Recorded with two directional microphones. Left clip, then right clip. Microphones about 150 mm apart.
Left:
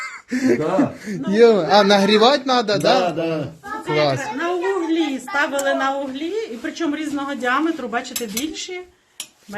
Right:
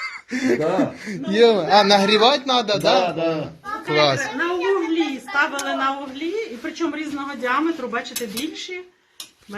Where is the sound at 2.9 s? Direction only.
20° left (ahead or behind).